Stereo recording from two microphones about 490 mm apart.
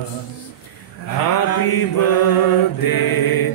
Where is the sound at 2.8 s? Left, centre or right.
Left.